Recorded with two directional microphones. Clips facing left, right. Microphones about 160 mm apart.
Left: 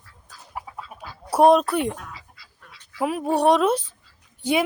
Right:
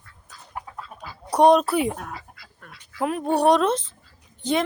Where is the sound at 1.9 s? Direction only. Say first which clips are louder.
Right 4 dB; 50° right (ahead or behind).